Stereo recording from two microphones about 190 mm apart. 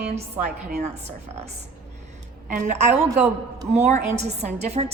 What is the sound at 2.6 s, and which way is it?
A woman's voice, 35° right (ahead or behind).